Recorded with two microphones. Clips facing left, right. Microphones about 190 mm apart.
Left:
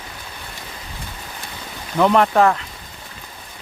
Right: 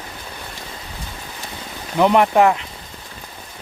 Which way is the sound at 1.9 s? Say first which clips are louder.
Right 1 dB; 15° right (ahead or behind).